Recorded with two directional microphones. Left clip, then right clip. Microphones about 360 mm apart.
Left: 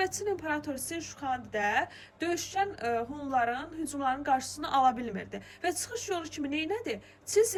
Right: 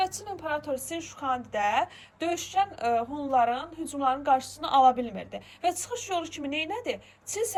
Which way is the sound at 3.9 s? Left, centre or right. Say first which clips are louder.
Right 5 dB; centre.